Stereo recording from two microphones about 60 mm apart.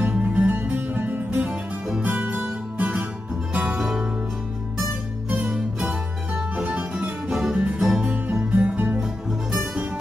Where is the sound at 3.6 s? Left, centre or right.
Centre.